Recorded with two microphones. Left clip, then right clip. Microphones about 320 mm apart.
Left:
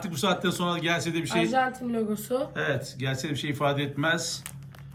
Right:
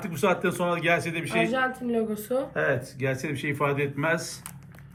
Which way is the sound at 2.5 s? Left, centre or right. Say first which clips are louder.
Right 3 dB; centre.